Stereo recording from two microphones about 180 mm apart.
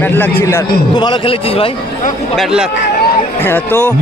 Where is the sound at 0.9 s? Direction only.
25° left (ahead or behind).